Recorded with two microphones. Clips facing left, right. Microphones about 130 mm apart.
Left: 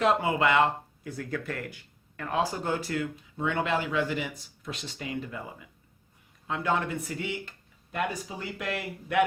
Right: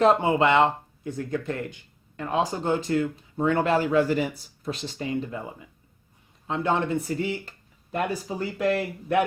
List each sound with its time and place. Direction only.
0.0 s speech: 25° right (ahead or behind)
4.6 s speech: 30° right (ahead or behind)